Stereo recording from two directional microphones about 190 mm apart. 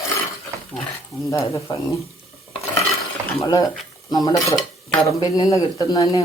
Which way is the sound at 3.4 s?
20° left (ahead or behind).